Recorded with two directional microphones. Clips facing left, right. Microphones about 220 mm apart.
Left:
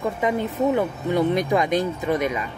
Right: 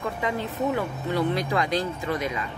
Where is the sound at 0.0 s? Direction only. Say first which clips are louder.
Left 5 dB; 20° left (ahead or behind).